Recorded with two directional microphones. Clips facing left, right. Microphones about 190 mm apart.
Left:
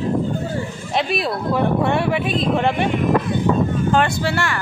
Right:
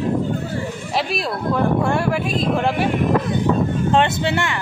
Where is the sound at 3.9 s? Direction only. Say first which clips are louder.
Right 3 dB; 25° right (ahead or behind).